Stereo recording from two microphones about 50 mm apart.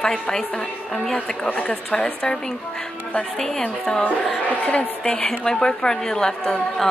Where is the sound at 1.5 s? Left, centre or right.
Left.